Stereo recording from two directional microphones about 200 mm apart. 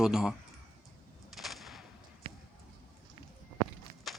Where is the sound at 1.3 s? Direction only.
Centre (ahead or behind).